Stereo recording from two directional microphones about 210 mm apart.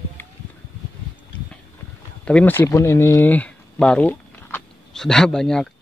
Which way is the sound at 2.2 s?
5° left (ahead or behind).